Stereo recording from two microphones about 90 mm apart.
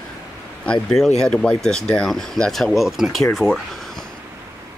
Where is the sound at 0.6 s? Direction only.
10° left (ahead or behind).